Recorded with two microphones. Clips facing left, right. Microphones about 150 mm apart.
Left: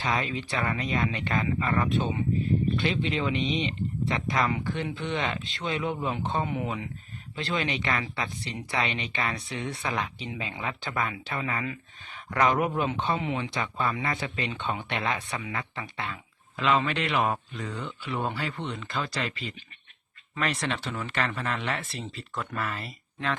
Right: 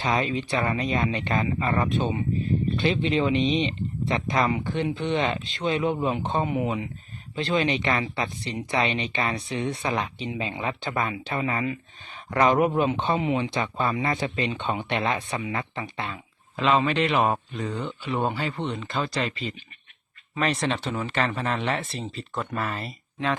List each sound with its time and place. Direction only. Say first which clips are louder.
0.0 s speech: right 4 dB; 25° right (ahead or behind)